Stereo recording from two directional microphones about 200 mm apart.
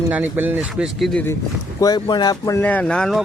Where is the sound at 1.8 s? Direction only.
20° left (ahead or behind).